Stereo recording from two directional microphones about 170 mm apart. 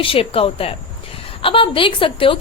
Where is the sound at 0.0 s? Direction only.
35° left (ahead or behind).